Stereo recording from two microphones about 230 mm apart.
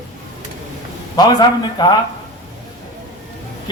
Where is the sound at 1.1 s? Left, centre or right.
Centre.